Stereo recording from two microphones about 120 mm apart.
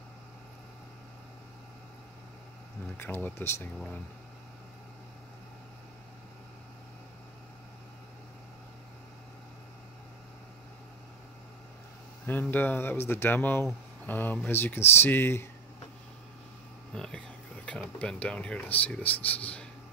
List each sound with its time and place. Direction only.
3.0 s speech: 15° left (ahead or behind)
12.3 s speech: 15° left (ahead or behind)
16.9 s speech: 5° left (ahead or behind)